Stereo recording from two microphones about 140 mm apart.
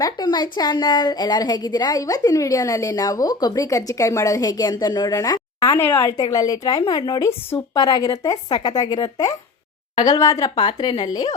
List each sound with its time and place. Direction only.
0.0 s a woman's voice: 30° left (ahead or behind)